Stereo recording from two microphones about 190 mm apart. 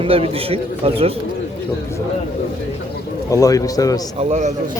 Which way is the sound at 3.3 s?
20° left (ahead or behind).